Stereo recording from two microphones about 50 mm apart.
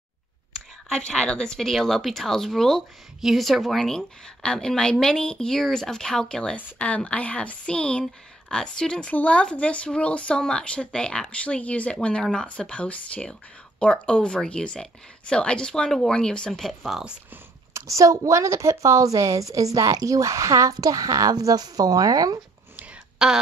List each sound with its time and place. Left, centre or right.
0.8 s speech: centre
3.2 s a woman's voice: centre
6.5 s speech: left
9.1 s speech: left
12.2 s speech: centre
12.4 s speech: left
16.5 s speech: centre
17.7 s a woman's voice: right
23.2 s a sound: centre